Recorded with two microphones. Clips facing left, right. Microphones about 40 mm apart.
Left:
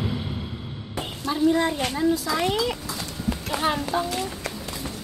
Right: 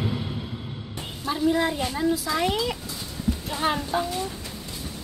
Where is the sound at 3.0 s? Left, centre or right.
Left.